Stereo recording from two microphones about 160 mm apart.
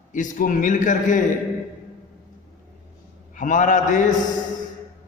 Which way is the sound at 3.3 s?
55° left (ahead or behind).